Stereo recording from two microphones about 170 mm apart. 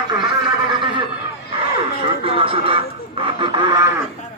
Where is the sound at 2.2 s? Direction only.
35° right (ahead or behind).